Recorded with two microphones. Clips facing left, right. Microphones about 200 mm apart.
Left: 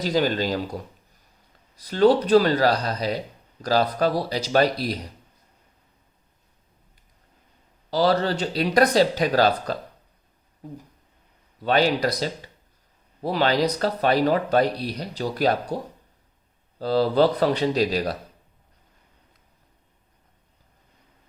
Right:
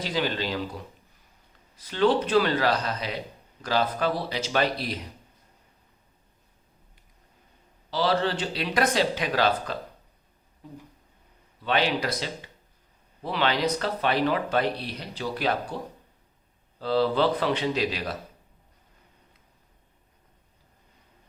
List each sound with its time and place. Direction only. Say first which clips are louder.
0.0 s speech: left 6 dB; 40° left (ahead or behind)
7.9 s speech: left 4 dB; 40° left (ahead or behind)
11.6 s speech: left 5 dB; 40° left (ahead or behind)